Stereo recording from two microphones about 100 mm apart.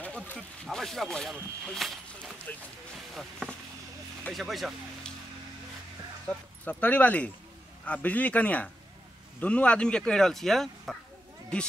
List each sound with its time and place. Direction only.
0.0 s a sound: 15° left (ahead or behind)
0.7 s speech: 5° left (ahead or behind)
2.5 s speech: 20° left (ahead or behind)
3.2 s speech: 5° left (ahead or behind)
6.2 s speech: 15° left (ahead or behind)